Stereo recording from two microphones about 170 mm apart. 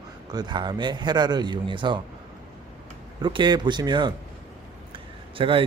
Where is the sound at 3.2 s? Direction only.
25° right (ahead or behind).